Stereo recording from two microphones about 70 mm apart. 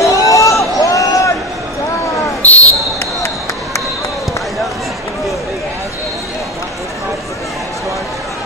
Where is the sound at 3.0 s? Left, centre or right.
Left.